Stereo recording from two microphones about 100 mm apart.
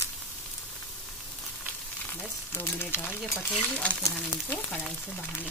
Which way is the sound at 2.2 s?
20° left (ahead or behind).